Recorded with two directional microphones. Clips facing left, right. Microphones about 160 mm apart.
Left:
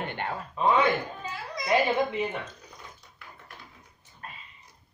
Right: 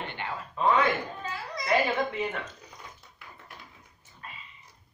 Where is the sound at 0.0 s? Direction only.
50° left (ahead or behind).